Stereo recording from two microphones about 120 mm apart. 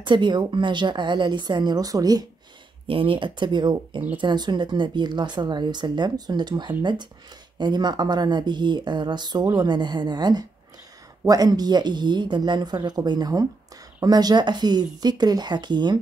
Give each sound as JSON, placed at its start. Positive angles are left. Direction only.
{"t": 0.0, "sound": "speech", "side_deg": -40}
{"t": 2.9, "sound": "speech", "side_deg": -45}